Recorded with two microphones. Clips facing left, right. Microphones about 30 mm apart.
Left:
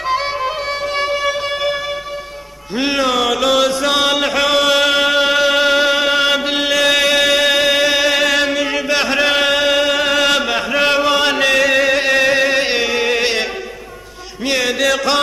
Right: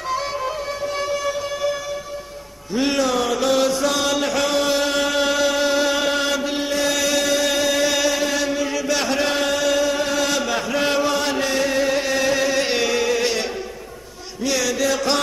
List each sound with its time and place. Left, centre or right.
0.0 s music: left
2.8 s music: left
3.1 s chant: left
6.5 s chant: left
8.1 s chant: left
13.1 s music: left
14.8 s a sound: left